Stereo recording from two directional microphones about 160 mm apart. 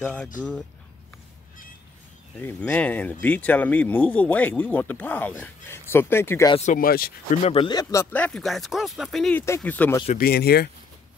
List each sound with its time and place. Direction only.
0.0 s speech: 5° left (ahead or behind)
2.4 s speech: 10° left (ahead or behind)
6.5 s speech: 50° left (ahead or behind); by 7.3 s 65° left (ahead or behind)
7.4 s speech: 35° left (ahead or behind); by 9.9 s 10° left (ahead or behind)
10.1 s speech: 75° left (ahead or behind)